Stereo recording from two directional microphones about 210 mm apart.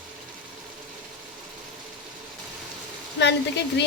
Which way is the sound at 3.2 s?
55° left (ahead or behind).